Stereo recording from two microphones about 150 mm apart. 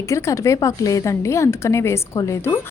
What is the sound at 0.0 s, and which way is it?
A woman's voice, 20° left (ahead or behind).